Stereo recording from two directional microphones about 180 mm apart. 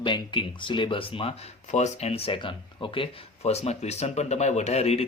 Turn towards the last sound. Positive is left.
turn(degrees=35)  # may be behind; listen again after turning